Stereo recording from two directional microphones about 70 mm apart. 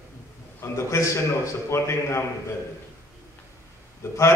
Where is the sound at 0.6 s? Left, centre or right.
Left.